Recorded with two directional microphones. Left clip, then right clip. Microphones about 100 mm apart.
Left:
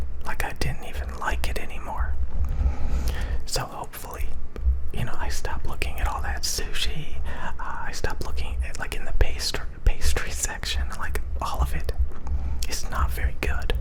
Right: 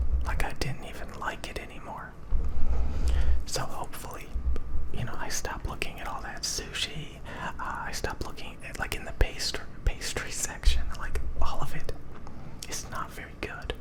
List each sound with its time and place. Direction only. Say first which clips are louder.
0.3 s whispering: left 3 dB; 25° left (ahead or behind); by 2.0 s 40° left (ahead or behind)
2.8 s a sound: left 4 dB; 50° left (ahead or behind)
3.1 s whispering: left 5 dB; 35° left (ahead or behind)
5.2 s whispering: right 1 dB; 15° left (ahead or behind)
5.9 s whispering: left 6 dB; 35° left (ahead or behind)
6.7 s a sound: left 3 dB; 25° left (ahead or behind)
7.3 s whispering: left 1 dB; 10° left (ahead or behind)
9.2 s whispering: left 5 dB; 30° left (ahead or behind); by 11.5 s 50° left (ahead or behind)
11.5 s whispering: left 4 dB; 35° left (ahead or behind)